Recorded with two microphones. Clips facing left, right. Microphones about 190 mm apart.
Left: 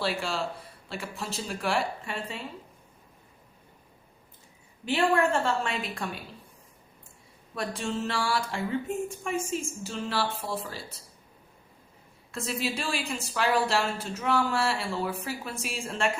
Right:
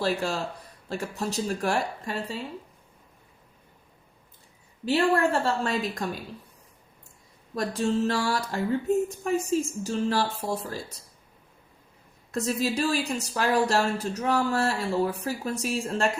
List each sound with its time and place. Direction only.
0.0 s a woman's voice: 45° right (ahead or behind)
4.9 s a woman's voice: 35° right (ahead or behind)
7.5 s a woman's voice: 40° right (ahead or behind)
12.3 s a woman's voice: 40° right (ahead or behind)